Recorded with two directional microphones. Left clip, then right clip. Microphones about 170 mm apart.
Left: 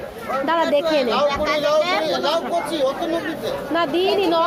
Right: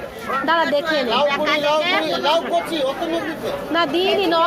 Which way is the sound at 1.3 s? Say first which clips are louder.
Right 1 dB; 85° left.